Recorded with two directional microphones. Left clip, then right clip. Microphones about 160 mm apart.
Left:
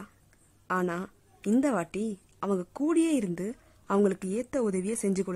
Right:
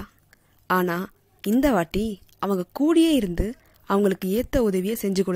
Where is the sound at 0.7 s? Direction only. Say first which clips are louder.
Right 7 dB; 20° right (ahead or behind).